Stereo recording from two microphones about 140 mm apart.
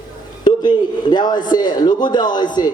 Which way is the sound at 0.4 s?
30° left (ahead or behind).